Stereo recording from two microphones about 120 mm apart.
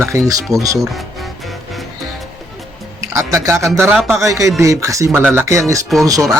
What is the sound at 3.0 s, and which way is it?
Speech, 25° right (ahead or behind).